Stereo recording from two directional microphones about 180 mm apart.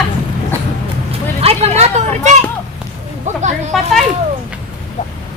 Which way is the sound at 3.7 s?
Centre (ahead or behind).